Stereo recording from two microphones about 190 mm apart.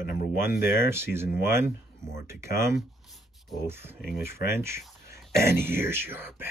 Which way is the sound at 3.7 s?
10° right (ahead or behind).